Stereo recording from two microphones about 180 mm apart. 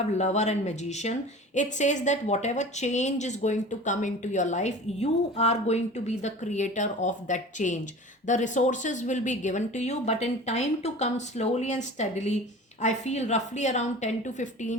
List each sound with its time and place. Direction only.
0.0 s a woman's voice: 40° left (ahead or behind)